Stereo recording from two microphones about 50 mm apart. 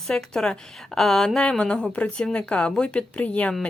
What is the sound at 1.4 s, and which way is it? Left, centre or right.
A woman's voice, left.